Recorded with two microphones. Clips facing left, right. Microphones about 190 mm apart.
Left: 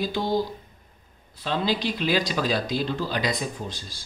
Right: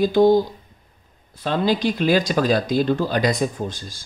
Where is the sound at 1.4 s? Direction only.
50° right (ahead or behind).